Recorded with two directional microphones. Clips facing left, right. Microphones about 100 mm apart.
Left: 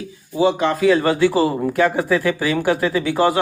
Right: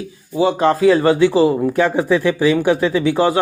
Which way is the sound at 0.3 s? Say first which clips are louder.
Right 2 dB; 35° right (ahead or behind).